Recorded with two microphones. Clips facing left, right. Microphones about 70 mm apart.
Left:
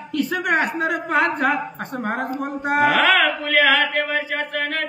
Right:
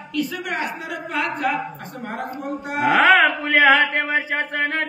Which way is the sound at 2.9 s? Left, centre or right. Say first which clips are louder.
Right 8 dB; right.